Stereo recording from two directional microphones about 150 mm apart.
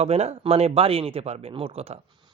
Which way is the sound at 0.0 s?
45° right (ahead or behind).